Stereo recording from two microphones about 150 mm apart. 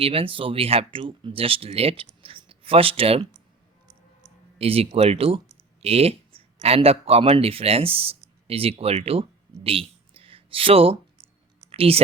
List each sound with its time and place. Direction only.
0.0 s speech: 40° right (ahead or behind)
4.5 s speech: 40° right (ahead or behind)
9.6 s a sound: 40° right (ahead or behind)
11.7 s speech: 40° right (ahead or behind)